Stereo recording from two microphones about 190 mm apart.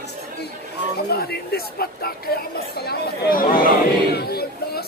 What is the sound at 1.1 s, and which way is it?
A man's voice, 55° left (ahead or behind).